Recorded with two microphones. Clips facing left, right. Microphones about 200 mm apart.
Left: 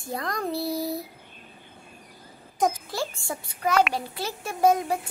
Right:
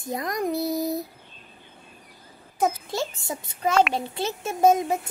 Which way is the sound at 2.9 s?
20° right (ahead or behind).